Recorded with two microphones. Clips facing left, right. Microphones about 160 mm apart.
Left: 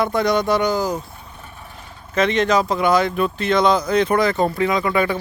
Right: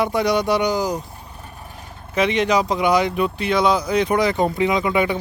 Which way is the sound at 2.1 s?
10° right (ahead or behind).